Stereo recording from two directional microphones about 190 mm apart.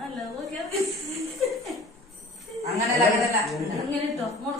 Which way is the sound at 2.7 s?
15° right (ahead or behind).